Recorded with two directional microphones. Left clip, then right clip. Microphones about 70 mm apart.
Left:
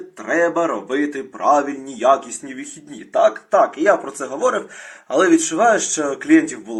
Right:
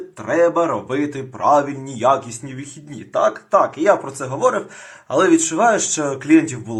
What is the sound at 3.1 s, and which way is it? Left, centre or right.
Speech, centre.